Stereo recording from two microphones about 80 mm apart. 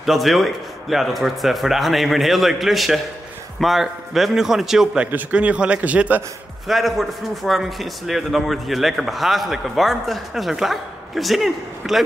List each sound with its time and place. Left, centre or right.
0.0 s a man's voice: centre
5.0 s a man's voice: centre
6.7 s a man's voice: centre